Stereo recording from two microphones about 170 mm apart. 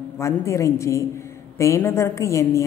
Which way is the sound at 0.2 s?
15° left (ahead or behind).